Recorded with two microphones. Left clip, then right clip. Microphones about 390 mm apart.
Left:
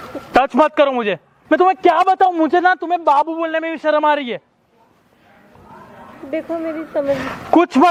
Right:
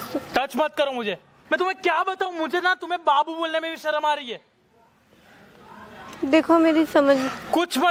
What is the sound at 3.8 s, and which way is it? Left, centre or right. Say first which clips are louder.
Speech: left 10 dB; left.